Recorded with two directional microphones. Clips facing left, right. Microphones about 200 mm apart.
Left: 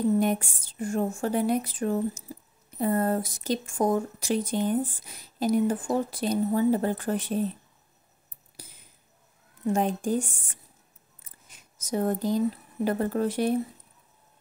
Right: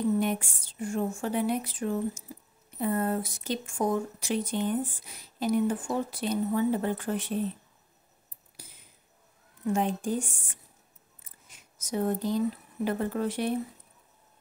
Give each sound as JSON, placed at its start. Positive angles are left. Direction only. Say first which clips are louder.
{"t": 0.2, "sound": "speech", "louder": "left 3 dB", "side_deg": 40}
{"t": 9.7, "sound": "speech", "louder": "left 2 dB", "side_deg": 40}
{"t": 11.9, "sound": "speech", "louder": "left 2 dB", "side_deg": 45}